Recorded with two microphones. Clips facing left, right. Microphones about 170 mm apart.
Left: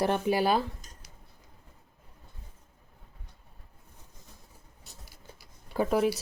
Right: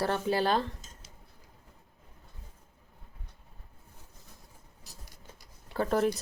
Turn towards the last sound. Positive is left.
turn(degrees=5)  # may be behind; listen again after turning